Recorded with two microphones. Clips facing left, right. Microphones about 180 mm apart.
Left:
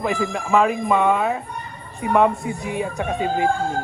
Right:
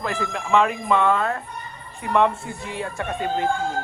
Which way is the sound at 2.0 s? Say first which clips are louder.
Left 3 dB; centre (ahead or behind).